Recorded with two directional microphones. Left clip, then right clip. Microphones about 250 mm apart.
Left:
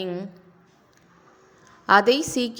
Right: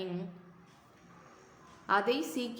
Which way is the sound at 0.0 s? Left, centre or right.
Left.